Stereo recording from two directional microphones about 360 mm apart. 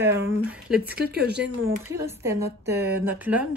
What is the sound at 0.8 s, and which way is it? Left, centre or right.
Speech, right.